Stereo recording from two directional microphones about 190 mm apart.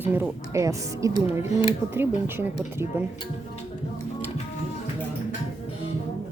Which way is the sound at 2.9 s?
15° right (ahead or behind).